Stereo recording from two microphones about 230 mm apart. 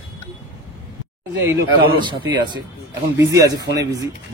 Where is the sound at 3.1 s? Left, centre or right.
Centre.